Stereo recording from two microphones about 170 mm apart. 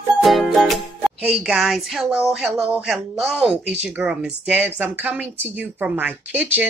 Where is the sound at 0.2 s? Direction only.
Centre (ahead or behind).